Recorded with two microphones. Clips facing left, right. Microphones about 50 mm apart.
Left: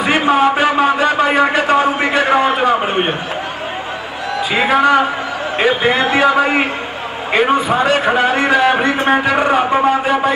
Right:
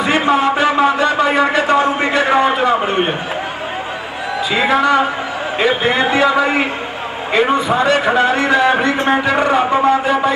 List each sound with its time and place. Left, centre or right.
0.3 s a sound: left
1.7 s a sound: centre
4.6 s a man's voice: left
5.7 s a man's voice: centre
6.1 s a man's voice: left
8.5 s a man's voice: left
9.5 s speech: centre